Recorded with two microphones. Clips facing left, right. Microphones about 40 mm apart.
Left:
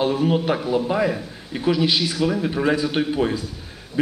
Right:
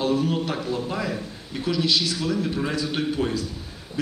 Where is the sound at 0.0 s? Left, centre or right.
Left.